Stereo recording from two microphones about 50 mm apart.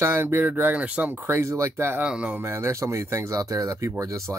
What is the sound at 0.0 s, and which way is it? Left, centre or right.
Speech, right.